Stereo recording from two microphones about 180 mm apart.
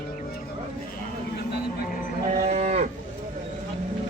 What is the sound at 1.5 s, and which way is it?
Music, 55° left (ahead or behind).